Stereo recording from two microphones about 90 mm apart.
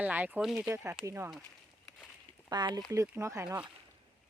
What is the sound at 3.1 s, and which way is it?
Speech, 30° right (ahead or behind).